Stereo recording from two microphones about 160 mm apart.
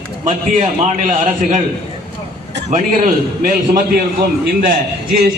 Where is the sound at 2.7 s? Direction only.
55° right (ahead or behind).